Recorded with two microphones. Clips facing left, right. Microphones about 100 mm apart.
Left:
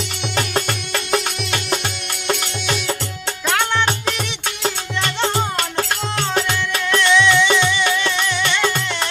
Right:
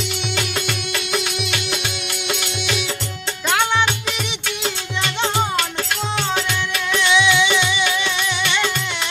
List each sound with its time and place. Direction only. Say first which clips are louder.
0.3 s music: left 6 dB; 40° left (ahead or behind)
5.5 s music: left 1 dB; 35° left (ahead or behind)
7.0 s music: left 2 dB; 5° right (ahead or behind)